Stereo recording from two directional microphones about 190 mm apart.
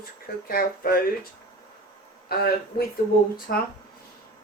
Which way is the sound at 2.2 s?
55° left (ahead or behind).